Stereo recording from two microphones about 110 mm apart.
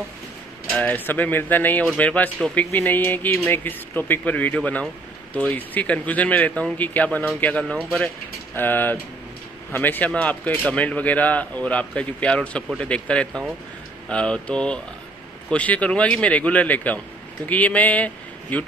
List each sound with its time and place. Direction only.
0.7 s speech: 15° left (ahead or behind)
8.5 s a man's voice: 20° left (ahead or behind)